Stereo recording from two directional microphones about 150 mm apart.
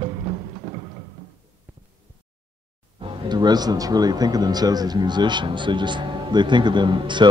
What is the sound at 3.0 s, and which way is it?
Speech, 30° right (ahead or behind).